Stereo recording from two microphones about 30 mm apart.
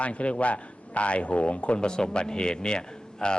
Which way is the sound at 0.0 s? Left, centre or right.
Left.